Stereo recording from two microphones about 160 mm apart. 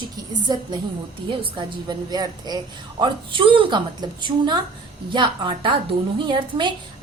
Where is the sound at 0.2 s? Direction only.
25° right (ahead or behind).